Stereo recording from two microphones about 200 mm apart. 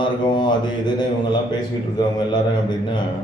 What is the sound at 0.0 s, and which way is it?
Speech, 20° left (ahead or behind).